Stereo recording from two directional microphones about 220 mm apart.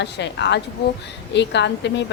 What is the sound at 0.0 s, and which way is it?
A woman's voice, 50° left (ahead or behind).